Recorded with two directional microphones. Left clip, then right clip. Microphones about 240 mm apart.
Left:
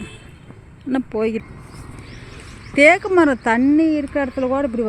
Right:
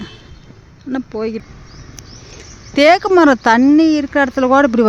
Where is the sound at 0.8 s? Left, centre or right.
Centre.